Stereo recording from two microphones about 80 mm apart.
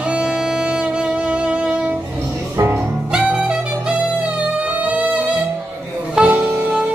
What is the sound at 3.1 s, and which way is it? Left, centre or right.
Music, centre.